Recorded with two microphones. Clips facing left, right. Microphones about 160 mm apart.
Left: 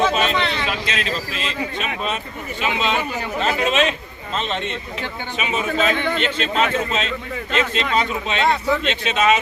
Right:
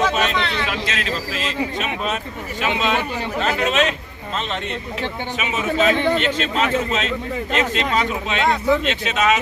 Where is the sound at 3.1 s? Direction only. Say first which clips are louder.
Right 1 dB; 25° right (ahead or behind).